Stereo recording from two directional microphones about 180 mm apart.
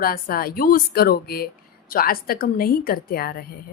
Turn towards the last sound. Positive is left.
turn(degrees=55)  # may be behind; listen again after turning